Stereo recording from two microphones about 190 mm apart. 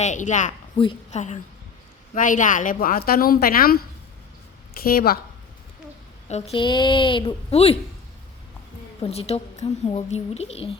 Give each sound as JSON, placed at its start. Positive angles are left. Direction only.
{"t": 0.0, "sound": "a woman's voice", "side_deg": 40}
{"t": 0.8, "sound": "a woman's voice", "side_deg": 25}
{"t": 2.1, "sound": "a woman's voice", "side_deg": 45}
{"t": 6.2, "sound": "a woman's voice", "side_deg": 35}
{"t": 9.0, "sound": "a woman's voice", "side_deg": 30}